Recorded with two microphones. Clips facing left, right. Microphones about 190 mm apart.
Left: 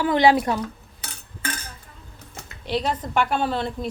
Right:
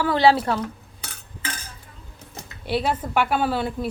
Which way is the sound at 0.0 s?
15° left (ahead or behind).